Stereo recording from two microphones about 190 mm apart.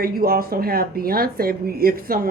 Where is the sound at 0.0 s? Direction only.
50° right (ahead or behind).